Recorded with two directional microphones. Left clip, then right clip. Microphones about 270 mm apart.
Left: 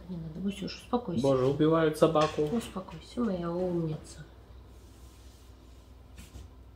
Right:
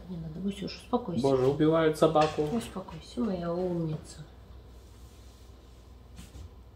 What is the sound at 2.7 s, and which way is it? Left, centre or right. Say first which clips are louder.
Speech: even; centre.